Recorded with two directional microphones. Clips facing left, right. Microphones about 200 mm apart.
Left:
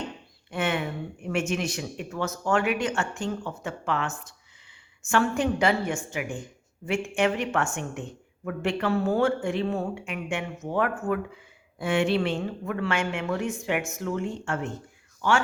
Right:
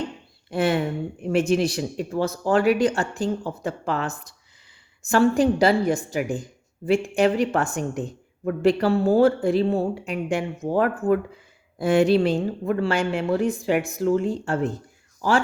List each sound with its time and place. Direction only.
0.5 s speech: 35° right (ahead or behind)